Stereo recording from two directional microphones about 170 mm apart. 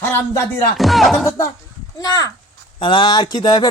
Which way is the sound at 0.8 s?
Centre (ahead or behind).